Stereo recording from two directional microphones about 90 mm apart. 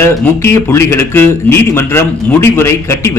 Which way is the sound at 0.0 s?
30° left (ahead or behind).